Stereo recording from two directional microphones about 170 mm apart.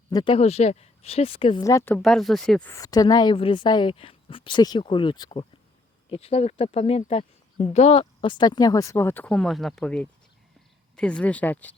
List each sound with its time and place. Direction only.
0.1 s speech: 25° left (ahead or behind)
0.3 s speech: 40° left (ahead or behind)
1.6 s speech: 15° left (ahead or behind)
2.0 s speech: centre (ahead or behind)
2.7 s speech: 20° left (ahead or behind)